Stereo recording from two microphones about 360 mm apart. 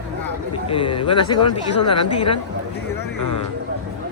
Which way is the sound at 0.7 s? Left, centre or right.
Centre.